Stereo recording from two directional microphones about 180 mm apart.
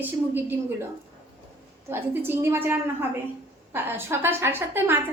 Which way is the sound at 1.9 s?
15° right (ahead or behind).